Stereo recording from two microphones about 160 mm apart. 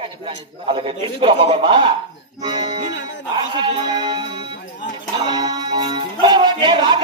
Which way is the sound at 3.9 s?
25° right (ahead or behind).